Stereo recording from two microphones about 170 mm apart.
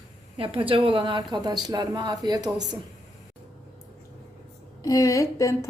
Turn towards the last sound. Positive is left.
turn(degrees=20)  # may be behind; listen again after turning